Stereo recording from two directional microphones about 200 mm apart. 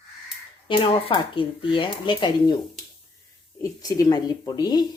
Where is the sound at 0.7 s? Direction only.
25° left (ahead or behind).